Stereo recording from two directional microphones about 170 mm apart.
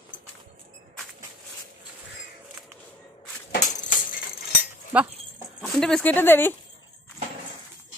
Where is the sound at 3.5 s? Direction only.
50° left (ahead or behind).